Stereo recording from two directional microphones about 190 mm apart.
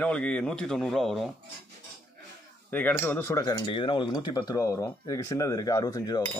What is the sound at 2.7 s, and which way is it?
Speech, 10° left (ahead or behind).